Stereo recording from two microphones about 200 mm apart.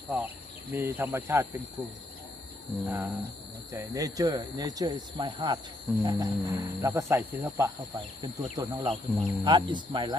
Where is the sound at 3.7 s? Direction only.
15° right (ahead or behind).